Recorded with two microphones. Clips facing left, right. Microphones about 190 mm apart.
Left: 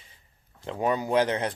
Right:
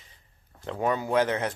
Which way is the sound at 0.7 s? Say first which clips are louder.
Left 1 dB; 15° left (ahead or behind).